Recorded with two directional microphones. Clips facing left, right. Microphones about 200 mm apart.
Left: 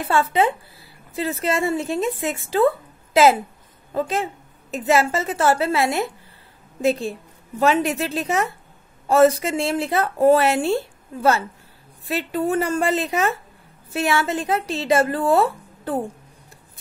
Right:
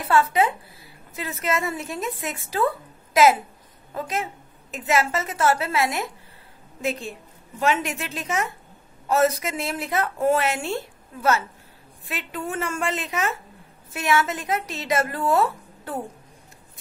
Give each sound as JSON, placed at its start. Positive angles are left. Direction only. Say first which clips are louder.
{"t": 0.0, "sound": "a woman's voice", "louder": "left 1 dB", "side_deg": 30}